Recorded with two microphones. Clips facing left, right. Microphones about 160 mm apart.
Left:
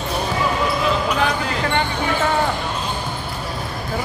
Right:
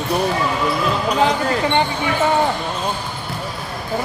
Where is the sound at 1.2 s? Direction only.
20° right (ahead or behind).